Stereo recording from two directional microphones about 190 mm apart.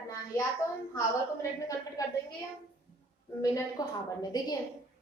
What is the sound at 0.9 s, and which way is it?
A woman's voice, 15° left (ahead or behind).